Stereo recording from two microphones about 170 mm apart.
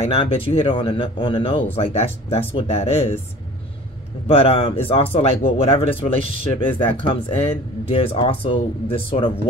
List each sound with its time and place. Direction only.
0.0 s speech: 35° left (ahead or behind)
4.3 s speech: 35° left (ahead or behind)